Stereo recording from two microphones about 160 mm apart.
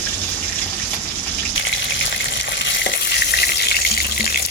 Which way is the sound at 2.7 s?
90° left.